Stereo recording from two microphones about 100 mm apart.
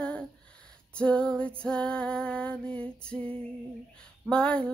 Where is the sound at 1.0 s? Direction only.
10° left (ahead or behind).